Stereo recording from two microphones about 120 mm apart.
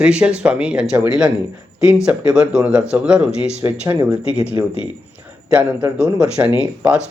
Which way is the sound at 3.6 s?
20° right (ahead or behind).